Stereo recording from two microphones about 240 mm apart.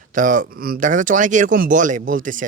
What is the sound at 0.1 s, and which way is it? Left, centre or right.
Speech, right.